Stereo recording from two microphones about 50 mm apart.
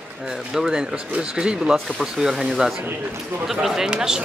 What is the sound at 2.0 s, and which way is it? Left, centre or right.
Speech, centre.